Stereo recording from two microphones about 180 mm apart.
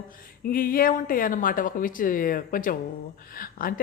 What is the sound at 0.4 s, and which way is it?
Speech, 55° left (ahead or behind).